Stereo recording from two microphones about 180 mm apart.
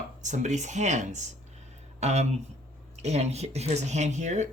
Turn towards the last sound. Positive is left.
turn(degrees=-40)  # may be behind; listen again after turning